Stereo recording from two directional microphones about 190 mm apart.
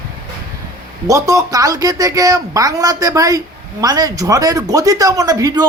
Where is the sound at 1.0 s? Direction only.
15° right (ahead or behind).